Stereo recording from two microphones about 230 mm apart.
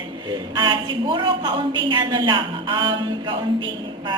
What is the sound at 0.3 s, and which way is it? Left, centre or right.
A woman's voice, centre.